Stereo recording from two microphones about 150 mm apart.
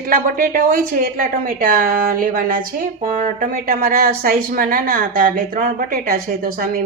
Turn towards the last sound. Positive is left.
turn(degrees=-75)  # may be behind; listen again after turning